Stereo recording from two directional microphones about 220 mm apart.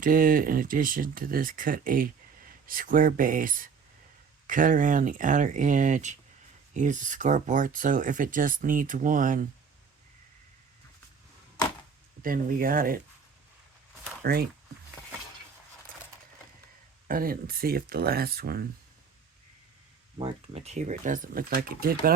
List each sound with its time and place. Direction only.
0.0 s speech: 40° right (ahead or behind)
12.2 s speech: 40° right (ahead or behind)
14.2 s speech: 45° right (ahead or behind)
17.1 s speech: 40° right (ahead or behind)
20.1 s speech: 30° right (ahead or behind)